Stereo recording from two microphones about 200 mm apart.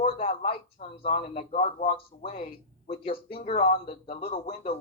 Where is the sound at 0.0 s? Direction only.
30° left (ahead or behind).